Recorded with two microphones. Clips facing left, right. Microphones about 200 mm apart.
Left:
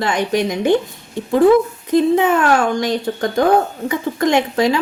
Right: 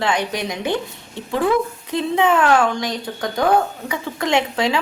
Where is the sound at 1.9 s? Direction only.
45° left (ahead or behind).